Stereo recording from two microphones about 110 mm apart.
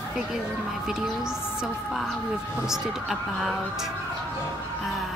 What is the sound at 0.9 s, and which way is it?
Speech, 5° right (ahead or behind).